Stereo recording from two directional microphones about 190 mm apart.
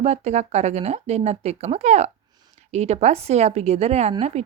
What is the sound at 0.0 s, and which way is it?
Speech, 35° right (ahead or behind).